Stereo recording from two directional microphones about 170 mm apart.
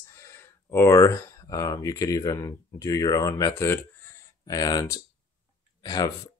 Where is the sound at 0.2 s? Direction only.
15° left (ahead or behind).